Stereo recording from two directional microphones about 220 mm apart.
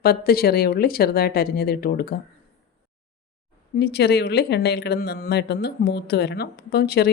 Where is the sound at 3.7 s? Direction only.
50° left (ahead or behind).